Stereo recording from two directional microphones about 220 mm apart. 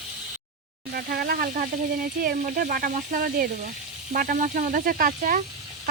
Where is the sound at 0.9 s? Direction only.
45° right (ahead or behind).